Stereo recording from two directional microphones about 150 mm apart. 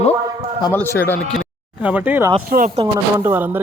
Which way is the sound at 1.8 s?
10° right (ahead or behind).